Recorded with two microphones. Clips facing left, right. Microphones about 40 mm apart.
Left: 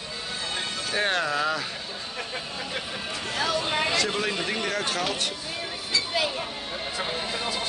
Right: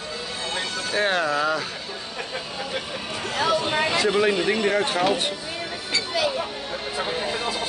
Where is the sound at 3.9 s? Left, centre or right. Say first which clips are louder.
Right 6 dB; centre.